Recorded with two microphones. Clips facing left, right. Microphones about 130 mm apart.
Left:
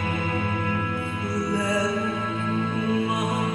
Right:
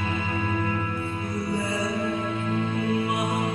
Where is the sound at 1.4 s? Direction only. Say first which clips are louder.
Left 3 dB; 90° left.